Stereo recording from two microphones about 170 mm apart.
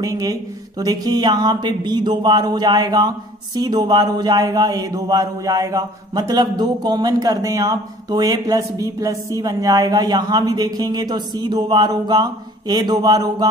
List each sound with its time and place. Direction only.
0.0 s speech: 20° right (ahead or behind)